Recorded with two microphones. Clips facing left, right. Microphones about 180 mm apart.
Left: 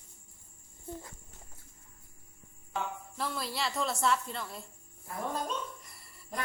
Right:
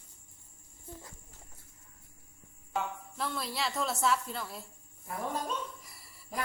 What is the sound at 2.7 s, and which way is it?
A woman's voice, centre (ahead or behind).